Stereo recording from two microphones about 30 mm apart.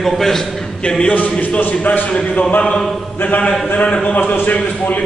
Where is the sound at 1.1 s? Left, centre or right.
Left.